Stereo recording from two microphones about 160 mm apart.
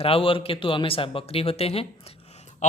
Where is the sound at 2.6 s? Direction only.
45° left (ahead or behind).